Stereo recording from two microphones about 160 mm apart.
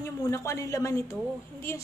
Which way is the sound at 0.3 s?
20° left (ahead or behind).